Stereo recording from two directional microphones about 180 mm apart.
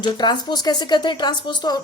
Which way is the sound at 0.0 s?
25° left (ahead or behind).